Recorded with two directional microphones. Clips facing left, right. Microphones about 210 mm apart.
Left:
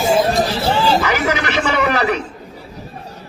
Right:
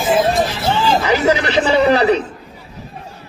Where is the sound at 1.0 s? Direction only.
30° right (ahead or behind).